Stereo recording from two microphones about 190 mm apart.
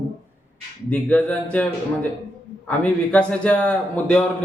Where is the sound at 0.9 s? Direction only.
5° left (ahead or behind).